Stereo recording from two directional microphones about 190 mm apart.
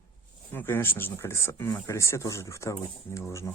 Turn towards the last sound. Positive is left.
turn(degrees=15)  # may be behind; listen again after turning